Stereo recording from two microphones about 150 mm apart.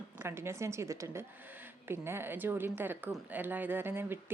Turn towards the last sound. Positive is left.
turn(degrees=-15)  # may be behind; listen again after turning